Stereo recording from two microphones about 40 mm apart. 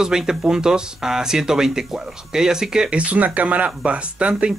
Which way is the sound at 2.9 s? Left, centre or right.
Right.